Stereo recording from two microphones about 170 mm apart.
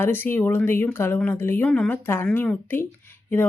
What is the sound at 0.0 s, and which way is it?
Speech, 10° left (ahead or behind).